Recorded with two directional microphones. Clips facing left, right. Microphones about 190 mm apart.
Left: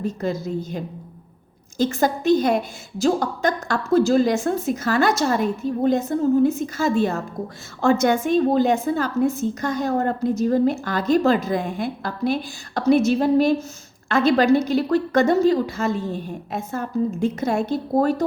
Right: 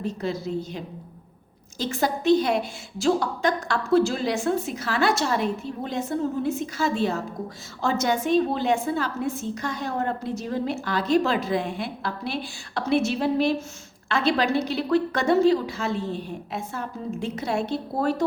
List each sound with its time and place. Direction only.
0.0 s a woman's voice: 45° left (ahead or behind)